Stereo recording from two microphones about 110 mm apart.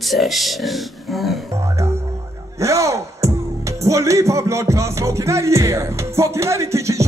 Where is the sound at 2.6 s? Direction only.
25° right (ahead or behind).